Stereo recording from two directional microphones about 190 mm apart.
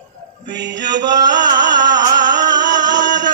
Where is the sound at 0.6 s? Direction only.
65° right (ahead or behind).